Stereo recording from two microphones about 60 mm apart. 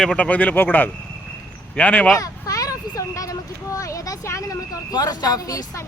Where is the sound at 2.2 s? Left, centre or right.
Left.